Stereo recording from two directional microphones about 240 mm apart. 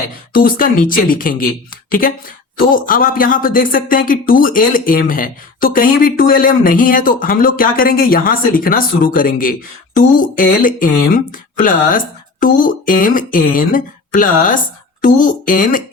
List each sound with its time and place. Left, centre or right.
0.3 s speech: left